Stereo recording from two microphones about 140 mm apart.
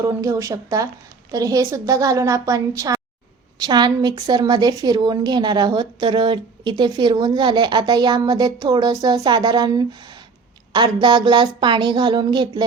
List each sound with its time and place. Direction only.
0.0 s a woman's voice: 25° right (ahead or behind)